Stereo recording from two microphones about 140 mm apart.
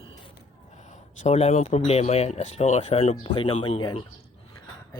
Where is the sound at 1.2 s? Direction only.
50° left (ahead or behind).